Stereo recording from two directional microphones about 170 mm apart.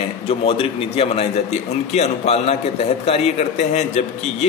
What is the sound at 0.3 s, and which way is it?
A man's voice, 35° left (ahead or behind).